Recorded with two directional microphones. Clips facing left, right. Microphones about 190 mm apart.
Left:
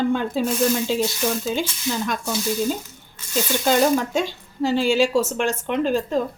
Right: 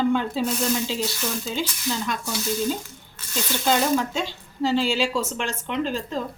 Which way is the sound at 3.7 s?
50° left (ahead or behind).